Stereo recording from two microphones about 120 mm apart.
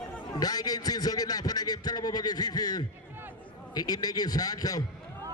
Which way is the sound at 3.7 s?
35° left (ahead or behind).